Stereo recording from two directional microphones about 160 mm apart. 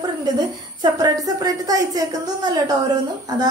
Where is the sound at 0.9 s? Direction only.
25° right (ahead or behind).